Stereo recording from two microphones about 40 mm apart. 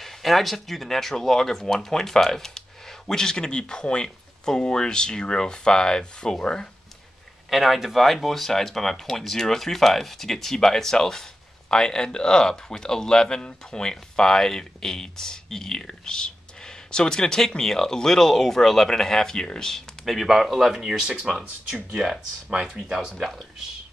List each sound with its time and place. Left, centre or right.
0.0 s speech: centre
7.4 s speech: centre; by 19.7 s left
19.7 s speech: centre
22.8 s speech: centre